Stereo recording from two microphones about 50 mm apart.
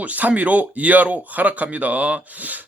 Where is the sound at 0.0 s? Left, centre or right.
Right.